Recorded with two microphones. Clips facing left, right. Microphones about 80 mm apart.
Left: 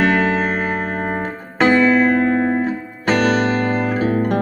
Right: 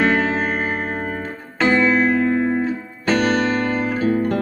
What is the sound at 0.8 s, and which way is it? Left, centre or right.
Music, left.